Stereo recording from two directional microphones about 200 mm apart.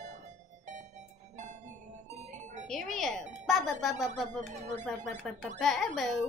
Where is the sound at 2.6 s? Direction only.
Centre (ahead or behind).